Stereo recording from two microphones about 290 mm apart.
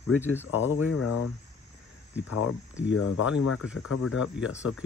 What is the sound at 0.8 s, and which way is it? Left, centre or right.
Speech, left.